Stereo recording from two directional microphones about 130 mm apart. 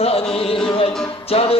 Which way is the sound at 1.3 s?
50° left (ahead or behind).